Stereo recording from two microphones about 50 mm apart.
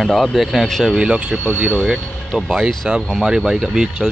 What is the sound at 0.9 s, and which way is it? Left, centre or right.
Speech, right.